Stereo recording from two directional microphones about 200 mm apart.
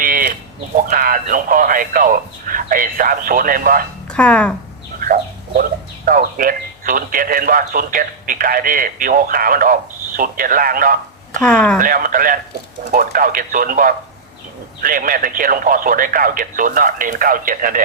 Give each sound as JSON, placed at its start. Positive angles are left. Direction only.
{"t": 0.0, "sound": "livestock", "side_deg": -45}
{"t": 0.9, "sound": "speech", "side_deg": -45}
{"t": 4.1, "sound": "speech", "side_deg": 5}
{"t": 4.9, "sound": "chicken", "side_deg": -45}
{"t": 6.1, "sound": "speech", "side_deg": -45}
{"t": 11.4, "sound": "speech", "side_deg": 5}
{"t": 11.8, "sound": "speech", "side_deg": -45}